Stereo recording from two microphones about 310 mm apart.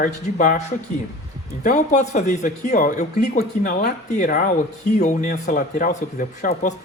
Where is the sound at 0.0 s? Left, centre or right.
Left.